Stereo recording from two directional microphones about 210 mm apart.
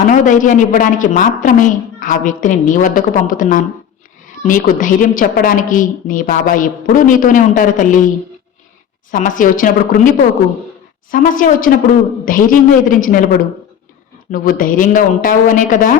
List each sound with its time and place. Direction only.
0.0 s a woman's voice: 40° left (ahead or behind)
9.1 s a woman's voice: 40° left (ahead or behind)
11.1 s a woman's voice: 40° left (ahead or behind)